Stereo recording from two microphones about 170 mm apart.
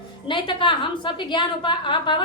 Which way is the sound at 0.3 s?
30° left (ahead or behind).